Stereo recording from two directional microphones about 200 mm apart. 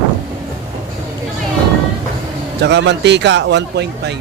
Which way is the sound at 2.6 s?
60° right (ahead or behind).